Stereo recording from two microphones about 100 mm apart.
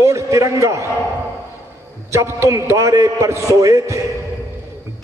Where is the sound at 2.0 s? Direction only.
30° right (ahead or behind).